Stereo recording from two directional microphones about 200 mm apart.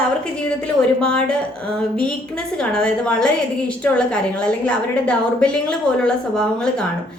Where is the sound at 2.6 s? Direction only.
5° left (ahead or behind).